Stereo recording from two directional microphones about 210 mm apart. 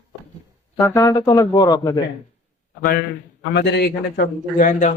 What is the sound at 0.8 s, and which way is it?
Speech, 15° left (ahead or behind).